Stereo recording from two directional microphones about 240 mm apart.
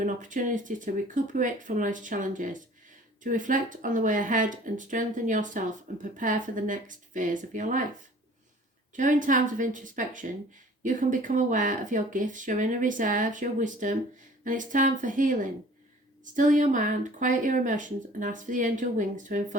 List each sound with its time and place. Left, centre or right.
0.0 s speech: right
9.0 s speech: right